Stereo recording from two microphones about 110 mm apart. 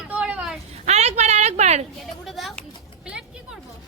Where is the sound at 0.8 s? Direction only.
90° right.